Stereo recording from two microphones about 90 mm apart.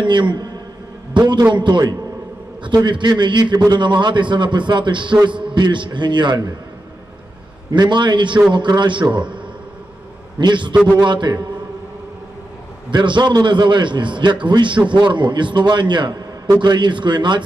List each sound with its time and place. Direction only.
0.0 s a man's voice: 60° right (ahead or behind)
7.7 s a man's voice: 55° right (ahead or behind)
10.4 s a man's voice: 60° right (ahead or behind)
12.9 s a man's voice: 60° right (ahead or behind)